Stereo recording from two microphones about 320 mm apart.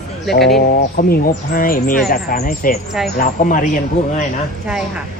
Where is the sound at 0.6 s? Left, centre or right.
Left.